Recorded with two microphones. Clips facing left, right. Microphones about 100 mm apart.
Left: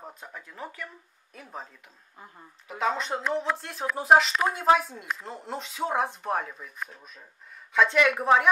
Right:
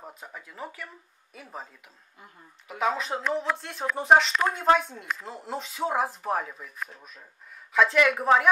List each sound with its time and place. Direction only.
0.0 s speech: 5° right (ahead or behind)
2.7 s speech: 5° right (ahead or behind)